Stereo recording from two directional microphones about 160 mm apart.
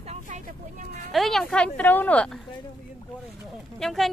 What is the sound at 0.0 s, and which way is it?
Vehicle, 50° right (ahead or behind).